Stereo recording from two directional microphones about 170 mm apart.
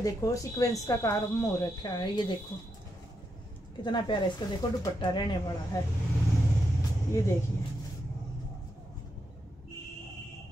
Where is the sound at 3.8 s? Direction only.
30° left (ahead or behind).